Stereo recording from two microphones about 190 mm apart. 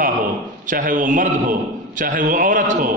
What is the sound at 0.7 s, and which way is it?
A man's voice, 45° right (ahead or behind).